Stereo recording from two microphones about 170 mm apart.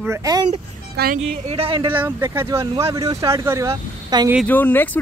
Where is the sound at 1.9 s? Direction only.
15° right (ahead or behind).